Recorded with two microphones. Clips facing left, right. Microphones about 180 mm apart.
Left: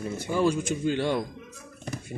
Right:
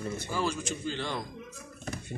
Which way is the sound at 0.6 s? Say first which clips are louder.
Left 8 dB; 55° left (ahead or behind).